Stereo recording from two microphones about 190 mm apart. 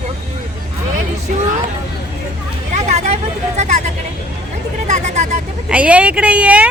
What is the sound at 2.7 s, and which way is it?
Vehicle, 35° right (ahead or behind).